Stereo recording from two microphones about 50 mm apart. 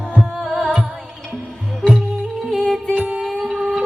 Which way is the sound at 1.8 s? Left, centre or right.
Centre.